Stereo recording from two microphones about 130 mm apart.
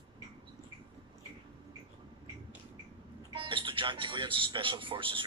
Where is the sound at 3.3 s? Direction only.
40° right (ahead or behind).